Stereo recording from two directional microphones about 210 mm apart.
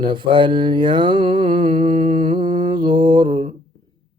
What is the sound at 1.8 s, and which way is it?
Mantra, 35° right (ahead or behind).